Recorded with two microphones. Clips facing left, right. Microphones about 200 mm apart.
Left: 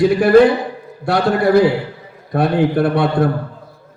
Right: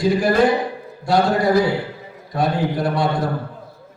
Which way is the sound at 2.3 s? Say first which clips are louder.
Left 5 dB; 60° left (ahead or behind).